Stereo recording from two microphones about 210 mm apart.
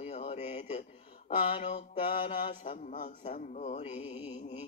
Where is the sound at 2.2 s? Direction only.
30° left (ahead or behind).